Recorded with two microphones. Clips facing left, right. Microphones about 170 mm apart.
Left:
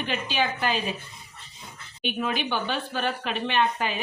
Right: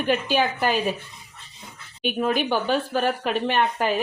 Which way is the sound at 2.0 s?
45° right (ahead or behind).